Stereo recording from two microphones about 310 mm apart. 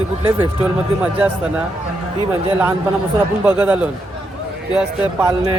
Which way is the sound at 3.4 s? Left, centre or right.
Centre.